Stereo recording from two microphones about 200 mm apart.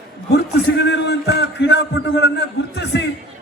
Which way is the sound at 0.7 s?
60° left (ahead or behind).